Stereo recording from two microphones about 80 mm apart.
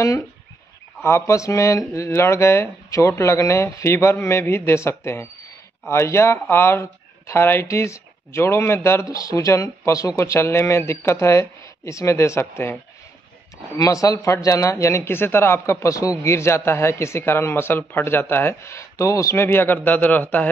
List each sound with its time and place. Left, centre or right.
1.0 s speech: left
9.1 s speech: left
13.7 s speech: left